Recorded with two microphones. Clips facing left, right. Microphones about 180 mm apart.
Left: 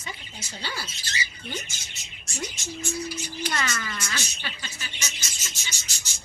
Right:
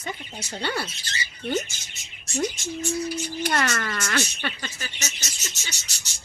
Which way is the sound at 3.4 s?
60° right (ahead or behind).